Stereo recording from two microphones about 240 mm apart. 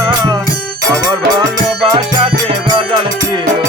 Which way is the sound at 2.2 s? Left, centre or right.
Centre.